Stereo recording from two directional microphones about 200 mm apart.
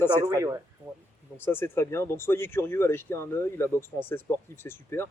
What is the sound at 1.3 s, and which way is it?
Speech, 10° left (ahead or behind).